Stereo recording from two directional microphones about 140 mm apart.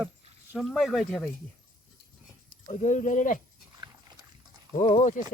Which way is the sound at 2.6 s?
60° left (ahead or behind).